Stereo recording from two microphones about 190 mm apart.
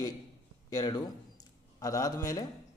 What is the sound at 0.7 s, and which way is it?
A man's voice, 20° left (ahead or behind).